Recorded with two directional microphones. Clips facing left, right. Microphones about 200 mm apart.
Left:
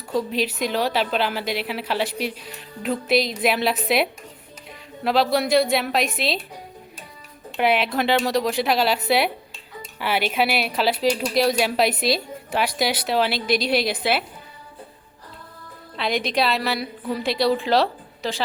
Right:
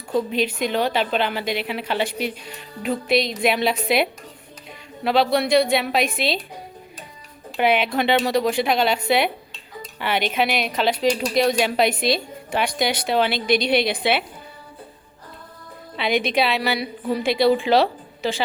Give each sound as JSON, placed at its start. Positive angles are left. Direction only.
{"t": 0.1, "sound": "speech", "side_deg": 0}
{"t": 7.5, "sound": "speech", "side_deg": 0}
{"t": 16.0, "sound": "speech", "side_deg": 0}